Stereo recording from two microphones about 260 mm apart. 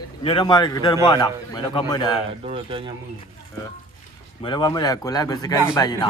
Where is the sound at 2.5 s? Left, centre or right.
Centre.